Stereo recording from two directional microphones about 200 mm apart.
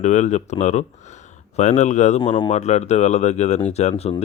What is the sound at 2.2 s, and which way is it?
Speech, 25° left (ahead or behind).